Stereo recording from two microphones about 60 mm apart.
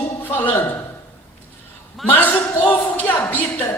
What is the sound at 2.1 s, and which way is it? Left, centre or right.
Speech, left.